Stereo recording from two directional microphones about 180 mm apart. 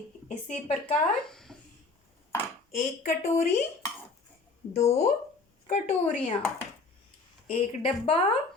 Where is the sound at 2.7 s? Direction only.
40° left (ahead or behind).